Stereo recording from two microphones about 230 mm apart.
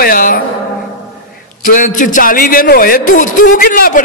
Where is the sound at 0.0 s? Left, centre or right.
Left.